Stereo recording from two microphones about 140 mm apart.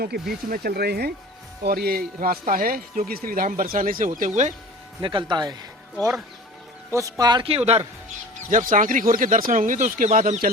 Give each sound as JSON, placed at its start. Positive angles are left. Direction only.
{"t": 0.0, "sound": "a man's voice", "side_deg": -90}
{"t": 5.0, "sound": "speech", "side_deg": -35}
{"t": 6.9, "sound": "speech", "side_deg": -25}
{"t": 7.5, "sound": "a man's voice", "side_deg": -45}
{"t": 8.4, "sound": "speech", "side_deg": -70}